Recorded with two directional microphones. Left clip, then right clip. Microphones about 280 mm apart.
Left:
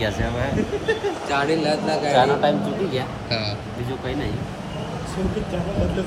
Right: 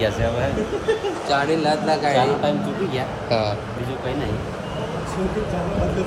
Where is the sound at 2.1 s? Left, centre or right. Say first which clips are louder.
Left 2 dB; centre.